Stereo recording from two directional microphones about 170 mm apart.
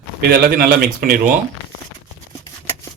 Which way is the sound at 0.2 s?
60° right (ahead or behind).